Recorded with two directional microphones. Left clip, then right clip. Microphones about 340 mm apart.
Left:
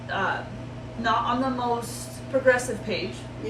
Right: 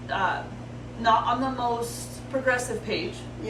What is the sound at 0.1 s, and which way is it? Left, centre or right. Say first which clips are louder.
A woman's voice: right 1 dB; centre.